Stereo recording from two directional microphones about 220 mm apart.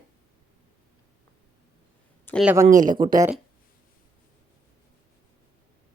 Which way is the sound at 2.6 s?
35° right (ahead or behind).